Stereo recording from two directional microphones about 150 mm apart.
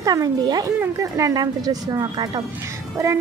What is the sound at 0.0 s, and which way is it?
Speech, 25° right (ahead or behind).